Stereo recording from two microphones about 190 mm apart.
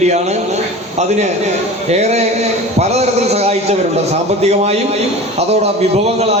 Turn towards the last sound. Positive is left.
turn(degrees=-30)  # may be behind; listen again after turning